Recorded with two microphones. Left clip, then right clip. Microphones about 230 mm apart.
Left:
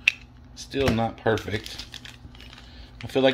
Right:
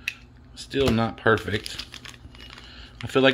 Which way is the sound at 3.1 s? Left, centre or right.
Right.